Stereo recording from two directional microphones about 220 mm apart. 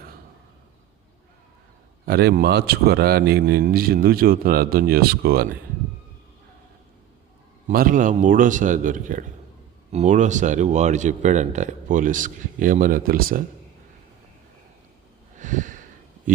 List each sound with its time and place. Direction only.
2.0 s speech: 45° right (ahead or behind)
7.7 s speech: 40° right (ahead or behind)
15.4 s a sound: 35° right (ahead or behind)